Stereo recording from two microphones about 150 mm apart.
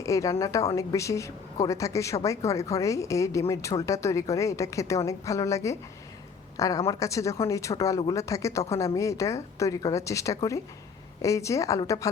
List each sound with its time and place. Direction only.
0.0 s a woman's voice: 20° left (ahead or behind)